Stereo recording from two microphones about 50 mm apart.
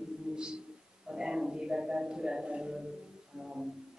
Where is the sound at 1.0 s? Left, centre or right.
Centre.